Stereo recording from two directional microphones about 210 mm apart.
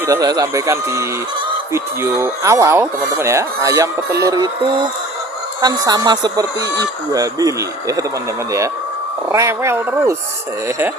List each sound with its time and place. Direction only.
0.0 s speech: 15° right (ahead or behind)
9.3 s speech: 15° right (ahead or behind)